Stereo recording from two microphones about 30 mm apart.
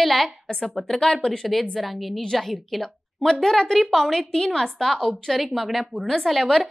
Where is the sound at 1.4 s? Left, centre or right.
Centre.